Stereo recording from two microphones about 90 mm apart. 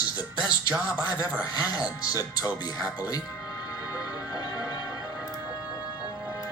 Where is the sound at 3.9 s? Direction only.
40° left (ahead or behind).